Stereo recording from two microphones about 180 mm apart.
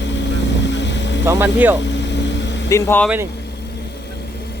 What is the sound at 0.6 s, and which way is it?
Vehicle, 80° left.